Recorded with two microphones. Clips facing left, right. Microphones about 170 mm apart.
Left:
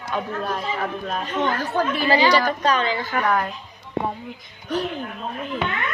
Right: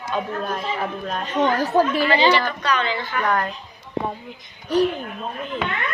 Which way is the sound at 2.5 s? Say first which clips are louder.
Left 2 dB; 40° left (ahead or behind).